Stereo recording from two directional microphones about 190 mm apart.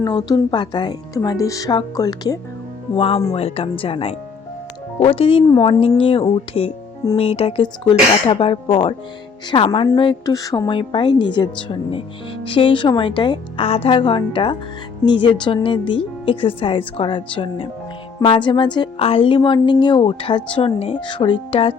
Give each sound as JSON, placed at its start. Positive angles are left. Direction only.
{"t": 0.0, "sound": "a woman's voice", "side_deg": 20}
{"t": 2.9, "sound": "a woman's voice", "side_deg": 30}